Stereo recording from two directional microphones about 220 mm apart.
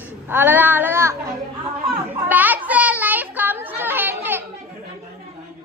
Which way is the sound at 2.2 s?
10° right (ahead or behind).